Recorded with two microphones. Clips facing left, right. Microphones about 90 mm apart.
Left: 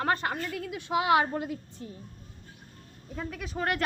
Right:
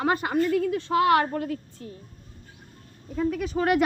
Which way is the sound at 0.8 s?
15° left (ahead or behind).